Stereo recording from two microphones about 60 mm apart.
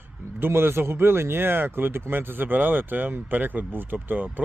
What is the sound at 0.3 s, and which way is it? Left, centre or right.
Speech, right.